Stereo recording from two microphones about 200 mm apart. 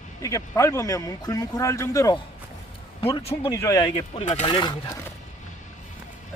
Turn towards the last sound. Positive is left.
turn(degrees=20)  # may be behind; listen again after turning